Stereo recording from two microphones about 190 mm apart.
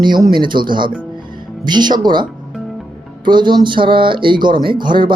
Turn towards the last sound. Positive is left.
turn(degrees=-25)  # may be behind; listen again after turning